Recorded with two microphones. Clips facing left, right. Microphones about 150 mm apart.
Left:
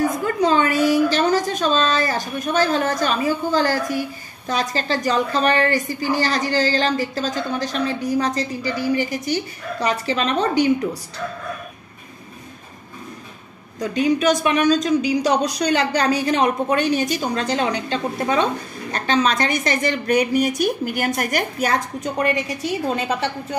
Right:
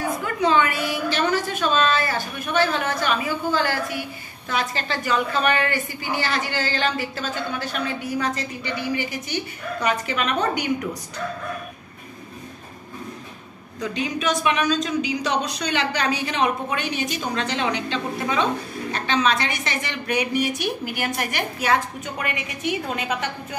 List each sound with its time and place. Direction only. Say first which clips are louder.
0.2 s a woman's voice: left 2 dB; 40° left (ahead or behind)
13.7 s a woman's voice: left 7 dB; 40° left (ahead or behind)